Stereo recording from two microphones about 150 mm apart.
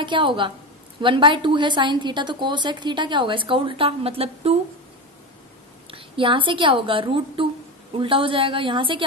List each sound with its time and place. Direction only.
0.0 s a woman's voice: 35° right (ahead or behind)
5.9 s a woman's voice: 35° right (ahead or behind)